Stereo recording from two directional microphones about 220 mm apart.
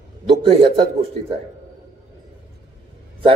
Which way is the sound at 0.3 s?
25° right (ahead or behind).